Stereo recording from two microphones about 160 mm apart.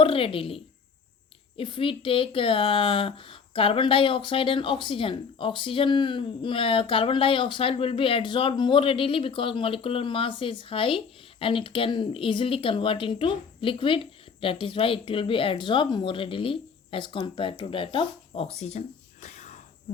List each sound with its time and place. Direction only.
0.0 s speech: 35° left (ahead or behind)
19.2 s whispering: 50° left (ahead or behind)